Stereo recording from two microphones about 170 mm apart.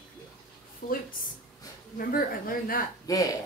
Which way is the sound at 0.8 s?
55° left (ahead or behind).